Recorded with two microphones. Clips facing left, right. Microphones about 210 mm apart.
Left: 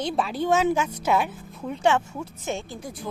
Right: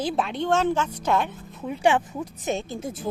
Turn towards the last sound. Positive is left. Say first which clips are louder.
# right 4 dB
turn(degrees=-25)  # may be behind; listen again after turning